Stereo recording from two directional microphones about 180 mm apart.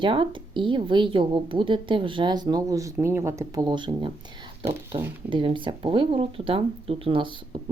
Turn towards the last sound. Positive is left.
turn(degrees=-30)  # may be behind; listen again after turning